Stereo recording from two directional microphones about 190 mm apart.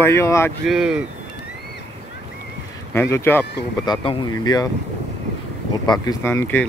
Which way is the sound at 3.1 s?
10° left (ahead or behind).